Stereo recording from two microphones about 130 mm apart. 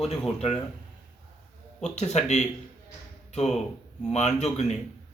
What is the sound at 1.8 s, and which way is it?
Speech, 60° left (ahead or behind).